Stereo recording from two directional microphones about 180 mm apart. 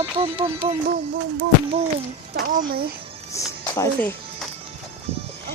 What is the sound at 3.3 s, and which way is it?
Speech, 15° left (ahead or behind).